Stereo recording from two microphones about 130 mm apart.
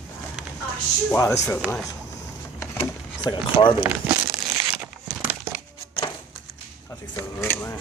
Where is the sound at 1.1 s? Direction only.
25° left (ahead or behind).